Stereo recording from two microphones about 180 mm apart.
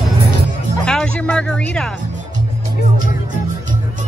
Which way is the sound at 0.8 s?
5° left (ahead or behind).